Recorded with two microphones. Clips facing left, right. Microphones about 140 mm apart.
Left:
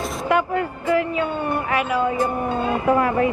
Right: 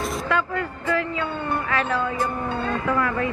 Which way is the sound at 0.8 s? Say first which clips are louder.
Left 4 dB; 15° left (ahead or behind).